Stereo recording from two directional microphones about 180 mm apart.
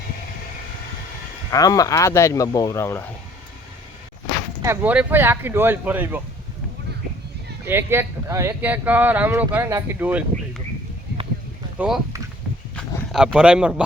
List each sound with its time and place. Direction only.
1.5 s speech: 20° left (ahead or behind)
4.6 s speech: 10° right (ahead or behind)
7.6 s speech: 15° right (ahead or behind)
11.8 s speech: 10° right (ahead or behind)